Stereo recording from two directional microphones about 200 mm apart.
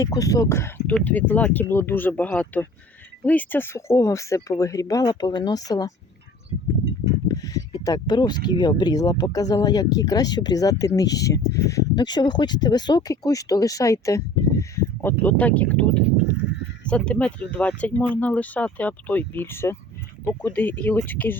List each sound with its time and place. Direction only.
0.0 s speech: 15° left (ahead or behind)
7.3 s speech: 20° left (ahead or behind)